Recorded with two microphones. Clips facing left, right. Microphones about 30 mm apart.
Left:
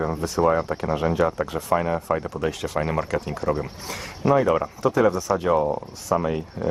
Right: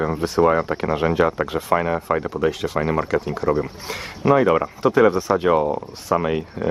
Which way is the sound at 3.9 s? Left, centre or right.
Right.